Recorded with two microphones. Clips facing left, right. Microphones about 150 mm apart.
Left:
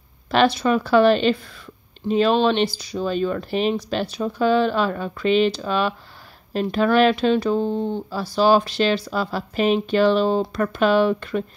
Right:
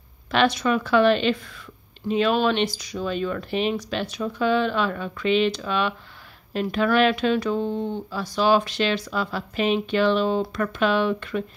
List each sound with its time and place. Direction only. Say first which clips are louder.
0.3 s speech: left 3 dB; 35° left (ahead or behind)